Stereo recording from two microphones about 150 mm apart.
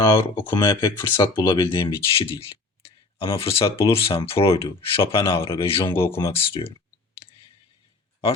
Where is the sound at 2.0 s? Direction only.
40° left (ahead or behind).